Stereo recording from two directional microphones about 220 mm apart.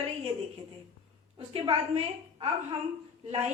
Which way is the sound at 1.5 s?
25° right (ahead or behind).